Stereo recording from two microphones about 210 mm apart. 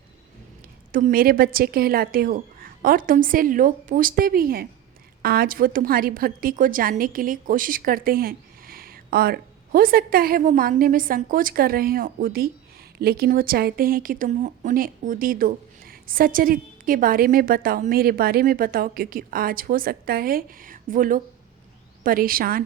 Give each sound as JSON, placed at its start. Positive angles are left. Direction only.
{"t": 0.9, "sound": "speech", "side_deg": -45}